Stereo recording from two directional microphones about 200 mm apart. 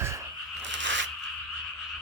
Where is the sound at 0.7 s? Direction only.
65° right (ahead or behind).